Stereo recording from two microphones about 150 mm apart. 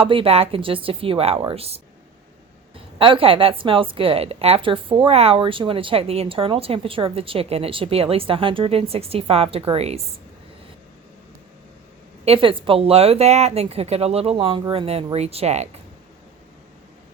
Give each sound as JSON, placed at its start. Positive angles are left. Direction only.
{"t": 0.0, "sound": "a woman's voice", "side_deg": -40}
{"t": 3.0, "sound": "a woman's voice", "side_deg": -35}
{"t": 12.2, "sound": "a woman's voice", "side_deg": -35}